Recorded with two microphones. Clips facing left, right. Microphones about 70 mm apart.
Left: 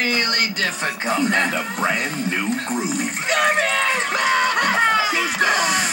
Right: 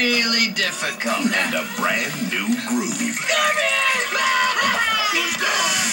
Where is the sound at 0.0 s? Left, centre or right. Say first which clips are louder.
Even; left.